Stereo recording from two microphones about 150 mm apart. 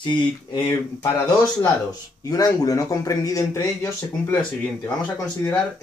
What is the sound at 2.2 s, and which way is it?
Speech, 25° left (ahead or behind).